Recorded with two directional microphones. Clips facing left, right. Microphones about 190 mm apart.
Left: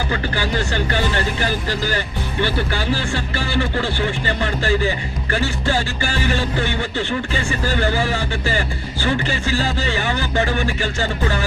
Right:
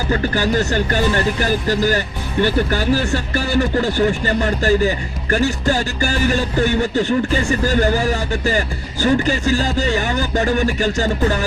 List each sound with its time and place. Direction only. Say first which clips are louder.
0.1 s speech: right 5 dB; 45° right (ahead or behind)